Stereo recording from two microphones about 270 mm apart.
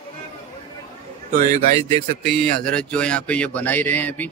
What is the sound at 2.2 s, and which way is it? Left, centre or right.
Speech, centre.